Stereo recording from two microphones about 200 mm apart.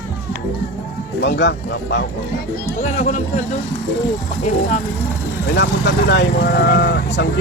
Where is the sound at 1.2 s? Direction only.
60° left (ahead or behind).